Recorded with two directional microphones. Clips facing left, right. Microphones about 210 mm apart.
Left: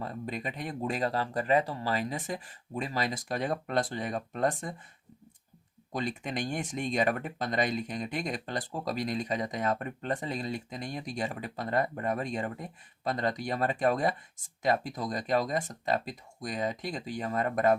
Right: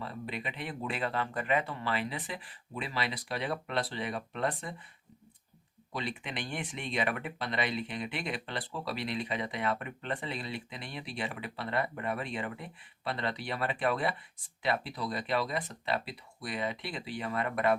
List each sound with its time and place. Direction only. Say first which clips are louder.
0.0 s speech: left 3 dB; 45° left (ahead or behind)
5.9 s speech: left 4 dB; 45° left (ahead or behind)